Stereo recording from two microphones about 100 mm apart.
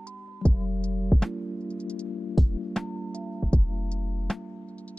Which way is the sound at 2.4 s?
Centre (ahead or behind).